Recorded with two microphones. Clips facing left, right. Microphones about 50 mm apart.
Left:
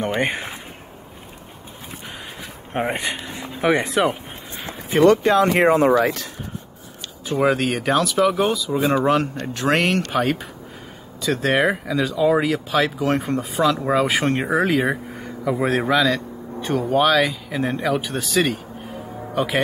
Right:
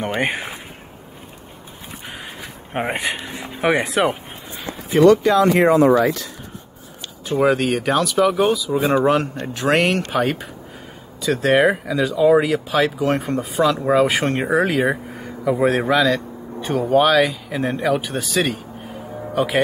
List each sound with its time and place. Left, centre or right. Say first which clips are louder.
0.2 s speech: right 1 dB; centre
2.7 s speech: right 1 dB; centre
4.9 s speech: right 2 dB; left
7.2 s speech: right 2 dB; centre